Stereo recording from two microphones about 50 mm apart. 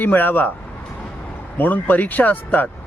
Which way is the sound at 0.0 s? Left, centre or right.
Left.